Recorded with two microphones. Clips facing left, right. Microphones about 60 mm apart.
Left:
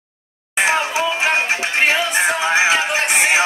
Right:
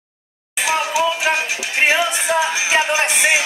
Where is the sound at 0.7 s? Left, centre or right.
Left.